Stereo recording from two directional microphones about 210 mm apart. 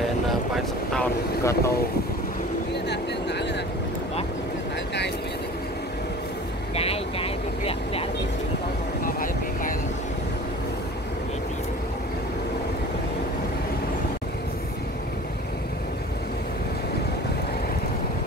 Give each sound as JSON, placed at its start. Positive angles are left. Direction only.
{"t": 1.4, "sound": "speech", "side_deg": 15}
{"t": 2.7, "sound": "vehicle", "side_deg": 55}
{"t": 6.7, "sound": "vehicle", "side_deg": 30}
{"t": 9.0, "sound": "vehicle", "side_deg": 40}